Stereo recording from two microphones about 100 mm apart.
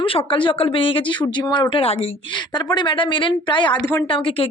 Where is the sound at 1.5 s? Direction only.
50° left (ahead or behind).